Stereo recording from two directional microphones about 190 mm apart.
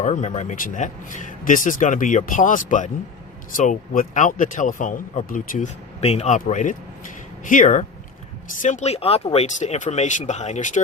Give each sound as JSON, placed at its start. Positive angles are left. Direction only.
{"t": 0.0, "sound": "speech", "side_deg": 40}